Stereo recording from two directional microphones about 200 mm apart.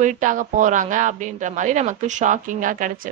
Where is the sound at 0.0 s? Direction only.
40° right (ahead or behind).